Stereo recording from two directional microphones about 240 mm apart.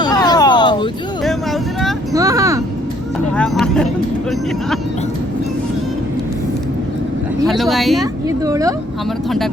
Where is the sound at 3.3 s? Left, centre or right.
Centre.